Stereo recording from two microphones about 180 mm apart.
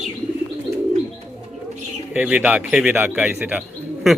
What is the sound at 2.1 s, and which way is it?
Speech, 10° right (ahead or behind).